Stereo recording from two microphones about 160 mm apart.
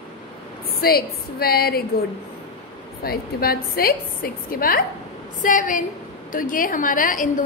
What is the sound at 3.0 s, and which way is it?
A woman's voice, 70° left (ahead or behind).